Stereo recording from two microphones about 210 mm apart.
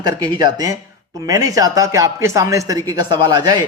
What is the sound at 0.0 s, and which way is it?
A man's voice, 20° right (ahead or behind).